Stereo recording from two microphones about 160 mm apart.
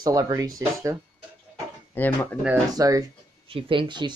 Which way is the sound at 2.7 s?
20° right (ahead or behind).